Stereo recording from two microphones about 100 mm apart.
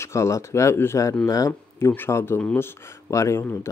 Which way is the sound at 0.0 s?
30° left (ahead or behind).